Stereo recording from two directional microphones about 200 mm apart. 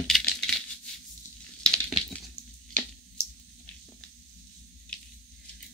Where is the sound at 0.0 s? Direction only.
Centre (ahead or behind).